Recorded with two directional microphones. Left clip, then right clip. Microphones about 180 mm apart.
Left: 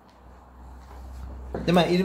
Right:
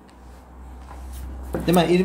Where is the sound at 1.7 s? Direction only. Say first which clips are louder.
Right 3 dB; 25° left (ahead or behind).